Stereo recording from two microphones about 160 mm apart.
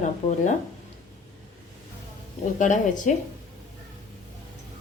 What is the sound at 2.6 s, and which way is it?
Speech, 55° left (ahead or behind).